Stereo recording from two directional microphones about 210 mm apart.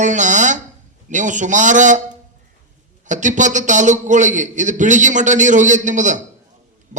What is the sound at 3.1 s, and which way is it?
A man's voice, 35° right (ahead or behind).